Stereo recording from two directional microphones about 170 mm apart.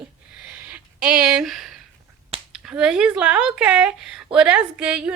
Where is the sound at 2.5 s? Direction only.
5° right (ahead or behind).